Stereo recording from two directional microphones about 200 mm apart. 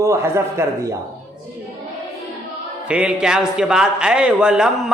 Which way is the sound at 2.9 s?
5° right (ahead or behind).